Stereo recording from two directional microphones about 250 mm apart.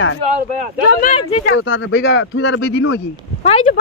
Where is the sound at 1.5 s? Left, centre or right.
Left.